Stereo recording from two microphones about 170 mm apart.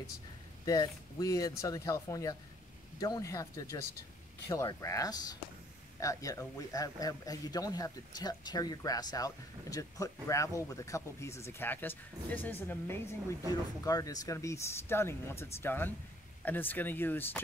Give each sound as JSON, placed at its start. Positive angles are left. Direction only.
{"t": 0.7, "sound": "a man's voice", "side_deg": 20}